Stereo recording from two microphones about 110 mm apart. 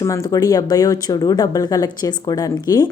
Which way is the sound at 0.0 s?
30° left (ahead or behind).